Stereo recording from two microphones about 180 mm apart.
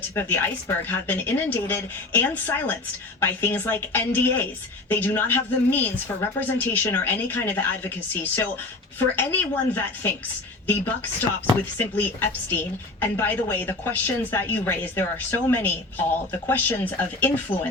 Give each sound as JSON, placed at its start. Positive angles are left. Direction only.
{"t": 0.1, "sound": "a woman's voice", "side_deg": 10}